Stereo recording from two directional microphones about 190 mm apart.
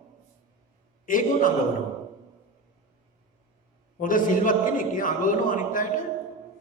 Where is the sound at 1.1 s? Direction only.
45° left (ahead or behind).